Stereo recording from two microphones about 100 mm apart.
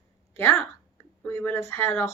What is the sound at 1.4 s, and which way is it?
Speech, 25° left (ahead or behind).